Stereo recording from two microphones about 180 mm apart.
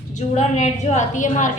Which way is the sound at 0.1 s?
40° left (ahead or behind).